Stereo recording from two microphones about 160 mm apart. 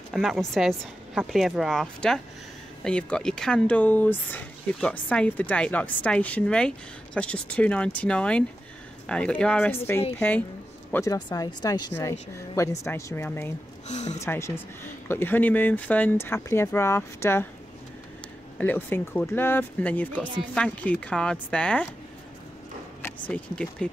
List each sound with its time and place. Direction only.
0.1 s speech: centre (ahead or behind); by 13.5 s 15° left (ahead or behind)
13.8 s speech: 45° left (ahead or behind)
14.2 s speech: 15° left (ahead or behind)
18.6 s speech: 10° left (ahead or behind)
23.0 s speech: 10° left (ahead or behind)